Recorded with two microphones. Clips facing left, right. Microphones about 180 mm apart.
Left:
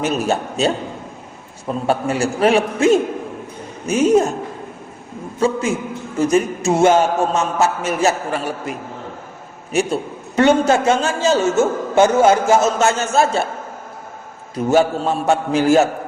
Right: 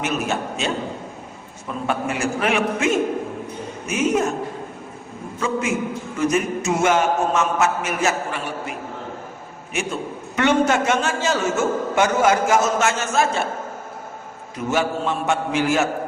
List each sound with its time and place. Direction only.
0.0 s a man's voice: 35° left (ahead or behind)
5.4 s a man's voice: 30° left (ahead or behind)
9.7 s a man's voice: 35° left (ahead or behind)
14.5 s a man's voice: 35° left (ahead or behind)